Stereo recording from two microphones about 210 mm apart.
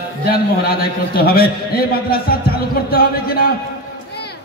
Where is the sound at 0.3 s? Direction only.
45° left (ahead or behind).